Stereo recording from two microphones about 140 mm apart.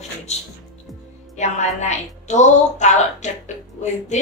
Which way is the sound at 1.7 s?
55° left (ahead or behind).